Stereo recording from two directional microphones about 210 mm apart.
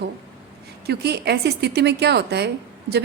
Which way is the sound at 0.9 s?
50° right (ahead or behind).